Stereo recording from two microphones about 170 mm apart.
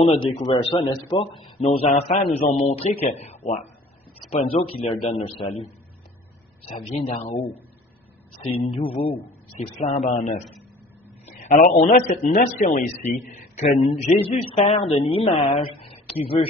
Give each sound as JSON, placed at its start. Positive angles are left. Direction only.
{"t": 0.0, "sound": "a man's voice", "side_deg": 35}
{"t": 7.1, "sound": "a man's voice", "side_deg": 35}
{"t": 8.5, "sound": "a man's voice", "side_deg": 30}
{"t": 15.8, "sound": "a sound", "side_deg": 35}